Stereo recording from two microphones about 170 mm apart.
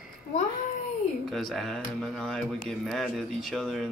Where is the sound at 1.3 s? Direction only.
Centre (ahead or behind).